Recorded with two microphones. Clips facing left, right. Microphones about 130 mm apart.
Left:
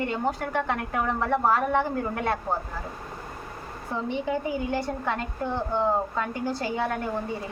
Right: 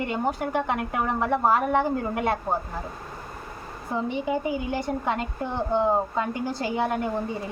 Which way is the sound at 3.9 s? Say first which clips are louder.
Right 2 dB; 10° right (ahead or behind).